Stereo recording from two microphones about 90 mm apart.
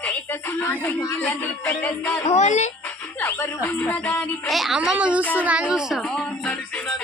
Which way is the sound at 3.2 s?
25° left (ahead or behind).